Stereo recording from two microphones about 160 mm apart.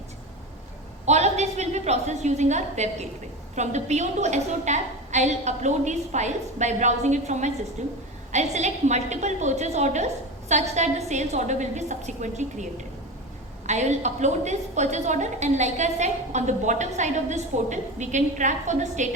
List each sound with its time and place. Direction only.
1.0 s a woman's voice: 45° right (ahead or behind)
13.7 s a woman's voice: 45° right (ahead or behind)